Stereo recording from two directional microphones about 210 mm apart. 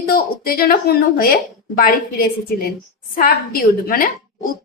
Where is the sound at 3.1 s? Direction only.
45° left (ahead or behind).